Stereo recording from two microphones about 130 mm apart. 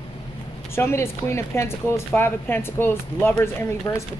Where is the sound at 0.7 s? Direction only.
20° left (ahead or behind).